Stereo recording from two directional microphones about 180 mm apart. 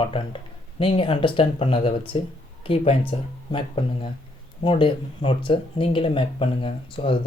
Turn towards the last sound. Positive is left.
turn(degrees=30)  # may be behind; listen again after turning